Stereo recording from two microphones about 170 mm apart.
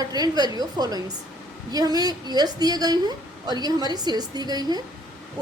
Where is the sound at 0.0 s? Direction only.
25° right (ahead or behind).